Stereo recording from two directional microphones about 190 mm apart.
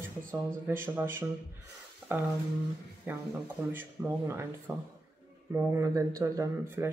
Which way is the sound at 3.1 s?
10° right (ahead or behind).